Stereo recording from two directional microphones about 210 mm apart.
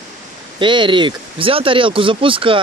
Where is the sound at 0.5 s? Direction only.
25° right (ahead or behind).